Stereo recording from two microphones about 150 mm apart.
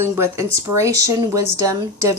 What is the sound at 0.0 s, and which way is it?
A woman's voice, 15° right (ahead or behind).